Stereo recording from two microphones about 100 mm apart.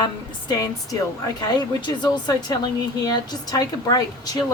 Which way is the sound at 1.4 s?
50° left (ahead or behind).